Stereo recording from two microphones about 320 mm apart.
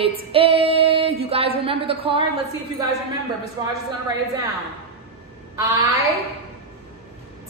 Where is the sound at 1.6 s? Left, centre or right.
Centre.